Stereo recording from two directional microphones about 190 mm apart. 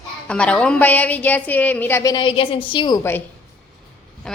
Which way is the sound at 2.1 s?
25° left (ahead or behind).